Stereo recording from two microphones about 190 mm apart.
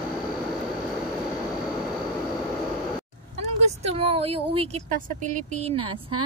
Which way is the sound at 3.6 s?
30° right (ahead or behind).